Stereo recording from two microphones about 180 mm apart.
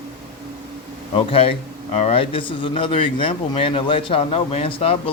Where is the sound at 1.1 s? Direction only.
30° left (ahead or behind).